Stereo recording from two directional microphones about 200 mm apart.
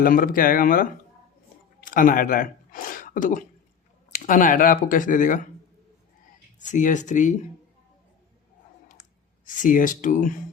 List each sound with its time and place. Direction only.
0.0 s speech: 45° left (ahead or behind)
6.6 s speech: 40° left (ahead or behind)
9.6 s speech: 40° left (ahead or behind)